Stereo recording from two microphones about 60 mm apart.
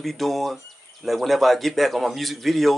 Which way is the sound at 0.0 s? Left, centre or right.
Centre.